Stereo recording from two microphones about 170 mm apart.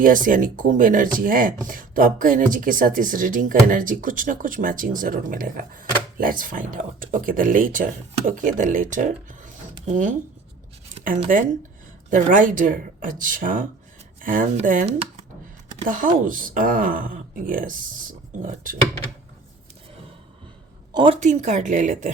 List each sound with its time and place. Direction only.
0.0 s speech: 50° right (ahead or behind)
10.9 s a sound: 50° right (ahead or behind)
12.1 s speech: 50° right (ahead or behind)
16.2 s speech: 55° right (ahead or behind)
20.9 s a woman's voice: 30° right (ahead or behind)
21.2 s speech: 45° right (ahead or behind)